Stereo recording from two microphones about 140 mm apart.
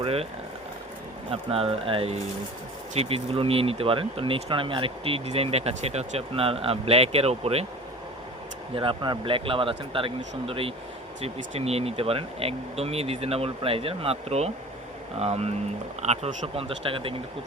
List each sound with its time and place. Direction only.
0.0 s boiling: 45° right (ahead or behind)
1.3 s speech: 45° right (ahead or behind)
8.7 s speech: 40° right (ahead or behind)